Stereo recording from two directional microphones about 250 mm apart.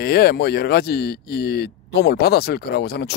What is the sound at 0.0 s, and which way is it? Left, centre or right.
Speech, left.